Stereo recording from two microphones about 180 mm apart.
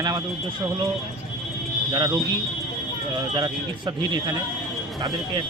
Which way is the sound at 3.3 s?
25° right (ahead or behind).